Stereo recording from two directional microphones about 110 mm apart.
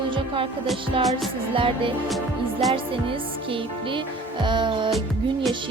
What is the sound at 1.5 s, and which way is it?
Speech, 50° right (ahead or behind).